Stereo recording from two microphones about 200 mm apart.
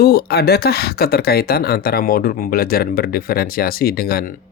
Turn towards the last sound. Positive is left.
turn(degrees=50)  # may be behind; listen again after turning